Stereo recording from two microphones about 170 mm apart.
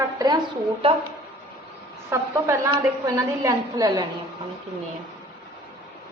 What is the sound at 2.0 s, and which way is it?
A woman's voice, 15° right (ahead or behind).